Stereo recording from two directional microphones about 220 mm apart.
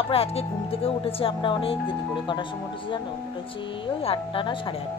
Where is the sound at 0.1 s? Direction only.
25° left (ahead or behind).